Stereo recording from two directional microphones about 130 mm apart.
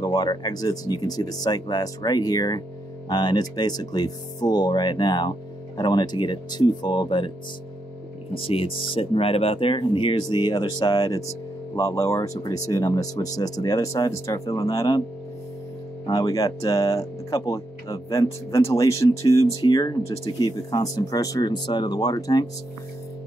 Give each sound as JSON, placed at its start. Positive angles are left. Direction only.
{"t": 0.0, "sound": "speech", "side_deg": 30}
{"t": 8.4, "sound": "speech", "side_deg": 45}
{"t": 16.1, "sound": "speech", "side_deg": 25}